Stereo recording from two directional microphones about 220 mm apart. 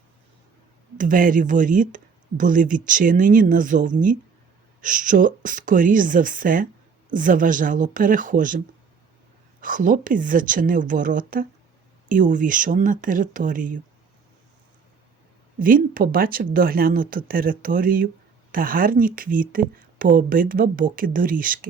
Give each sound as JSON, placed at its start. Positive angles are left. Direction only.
{"t": 0.9, "sound": "speech", "side_deg": -40}
{"t": 15.5, "sound": "speech", "side_deg": -40}